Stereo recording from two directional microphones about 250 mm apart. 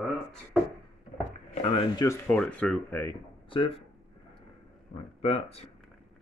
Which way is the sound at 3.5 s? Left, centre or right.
Left.